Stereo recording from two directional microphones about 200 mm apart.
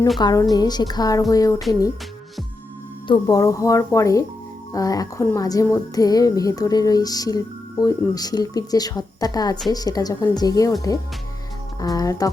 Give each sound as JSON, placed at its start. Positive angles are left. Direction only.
{"t": 0.2, "sound": "a woman's voice", "side_deg": 20}
{"t": 1.3, "sound": "music", "side_deg": 15}
{"t": 3.1, "sound": "music", "side_deg": 15}
{"t": 9.7, "sound": "a woman's voice", "side_deg": 20}
{"t": 11.8, "sound": "music", "side_deg": 20}